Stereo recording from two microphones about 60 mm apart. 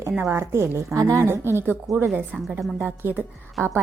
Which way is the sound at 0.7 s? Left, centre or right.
Right.